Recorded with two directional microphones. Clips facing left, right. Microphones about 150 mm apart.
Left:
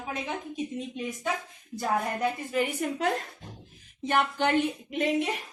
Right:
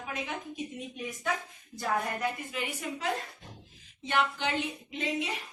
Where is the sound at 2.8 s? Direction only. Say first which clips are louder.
Left 6 dB; 55° left (ahead or behind).